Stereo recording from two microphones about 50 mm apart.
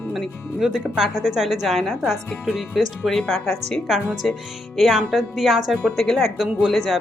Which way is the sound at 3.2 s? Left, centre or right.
Centre.